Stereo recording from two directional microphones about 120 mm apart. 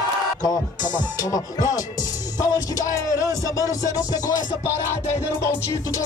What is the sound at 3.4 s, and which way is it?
Speech, 30° left (ahead or behind).